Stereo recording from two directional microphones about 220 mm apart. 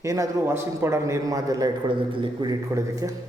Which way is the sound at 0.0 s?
15° right (ahead or behind).